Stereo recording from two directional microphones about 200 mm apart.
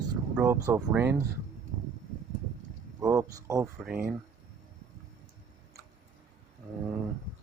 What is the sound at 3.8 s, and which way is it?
Speech, 10° right (ahead or behind).